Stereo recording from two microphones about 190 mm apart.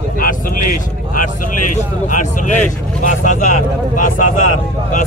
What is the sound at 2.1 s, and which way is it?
Speech, 40° left (ahead or behind).